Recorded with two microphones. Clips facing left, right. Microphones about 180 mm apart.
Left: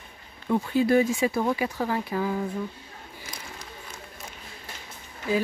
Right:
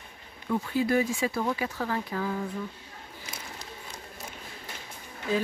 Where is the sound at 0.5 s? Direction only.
25° left (ahead or behind).